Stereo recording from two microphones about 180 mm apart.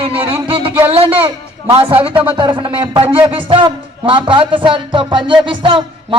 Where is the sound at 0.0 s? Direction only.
30° right (ahead or behind).